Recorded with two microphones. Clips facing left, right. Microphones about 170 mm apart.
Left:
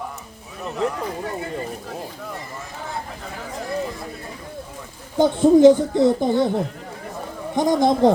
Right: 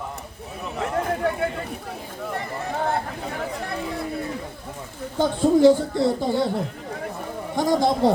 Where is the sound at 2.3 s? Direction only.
60° right (ahead or behind).